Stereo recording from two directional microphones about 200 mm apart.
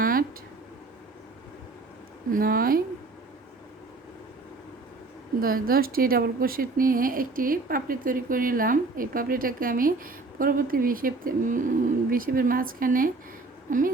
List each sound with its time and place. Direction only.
0.0 s a sound: 45° right (ahead or behind)
2.3 s speech: 45° right (ahead or behind)
5.4 s a woman's voice: 45° right (ahead or behind)